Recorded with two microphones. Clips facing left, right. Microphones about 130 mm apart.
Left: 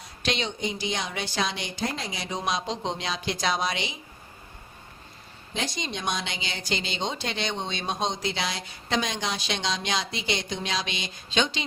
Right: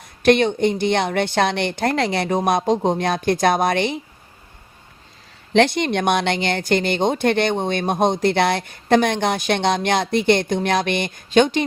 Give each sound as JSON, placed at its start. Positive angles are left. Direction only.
{"t": 0.0, "sound": "speech", "side_deg": -55}
{"t": 5.5, "sound": "speech", "side_deg": -65}